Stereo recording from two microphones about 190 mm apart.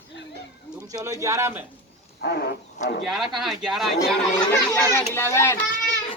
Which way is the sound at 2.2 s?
60° left (ahead or behind).